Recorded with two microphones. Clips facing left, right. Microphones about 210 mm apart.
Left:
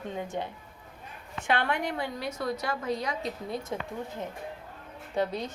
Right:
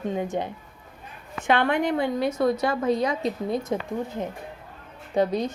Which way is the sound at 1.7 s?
20° right (ahead or behind).